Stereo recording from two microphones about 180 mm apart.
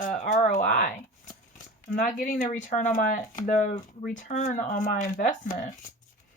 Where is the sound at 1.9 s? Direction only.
50° left (ahead or behind).